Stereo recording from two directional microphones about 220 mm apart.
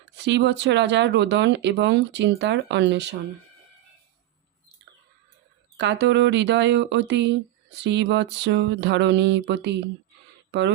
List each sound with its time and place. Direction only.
0.3 s speech: 50° right (ahead or behind)
5.7 s speech: 50° right (ahead or behind)